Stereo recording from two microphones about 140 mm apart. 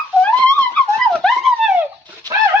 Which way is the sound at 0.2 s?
10° left (ahead or behind).